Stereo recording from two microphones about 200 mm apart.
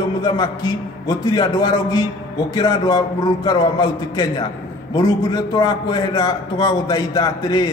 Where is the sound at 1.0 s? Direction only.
20° left (ahead or behind).